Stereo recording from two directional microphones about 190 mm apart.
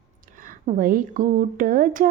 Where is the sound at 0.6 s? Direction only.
45° right (ahead or behind).